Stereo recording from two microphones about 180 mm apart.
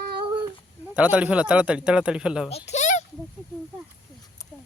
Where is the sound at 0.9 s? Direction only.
5° right (ahead or behind).